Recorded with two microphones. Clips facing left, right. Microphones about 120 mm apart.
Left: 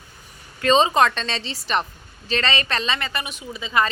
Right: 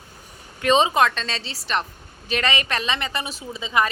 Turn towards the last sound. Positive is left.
turn(degrees=-20)  # may be behind; listen again after turning